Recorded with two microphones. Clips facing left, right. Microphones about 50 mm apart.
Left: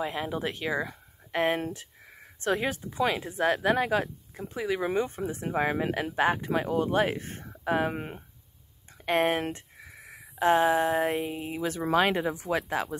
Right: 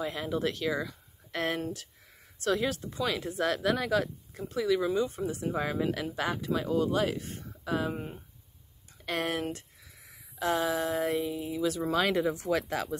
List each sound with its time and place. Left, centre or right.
0.0 s speech: left
7.9 s speech: left
9.0 s speech: left